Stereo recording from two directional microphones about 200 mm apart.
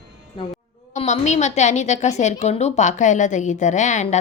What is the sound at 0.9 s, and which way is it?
A woman's voice, 35° left (ahead or behind).